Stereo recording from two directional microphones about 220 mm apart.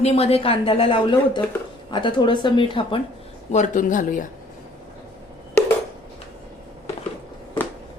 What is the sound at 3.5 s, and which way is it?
Speech, 35° left (ahead or behind).